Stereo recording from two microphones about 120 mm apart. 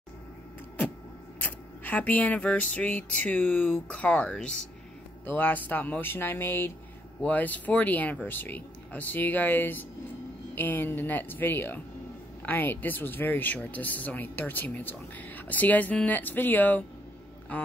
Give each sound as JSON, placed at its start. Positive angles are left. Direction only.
{"t": 1.4, "sound": "speech", "side_deg": 15}